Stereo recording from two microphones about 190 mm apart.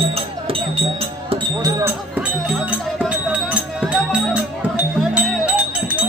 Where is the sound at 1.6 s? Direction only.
10° right (ahead or behind).